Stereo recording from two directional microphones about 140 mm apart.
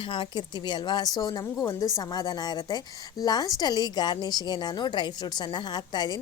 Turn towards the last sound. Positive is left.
turn(degrees=30)  # may be behind; listen again after turning